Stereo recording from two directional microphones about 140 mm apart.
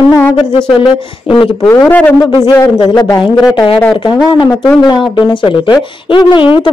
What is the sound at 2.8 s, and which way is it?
Speech, 25° left (ahead or behind).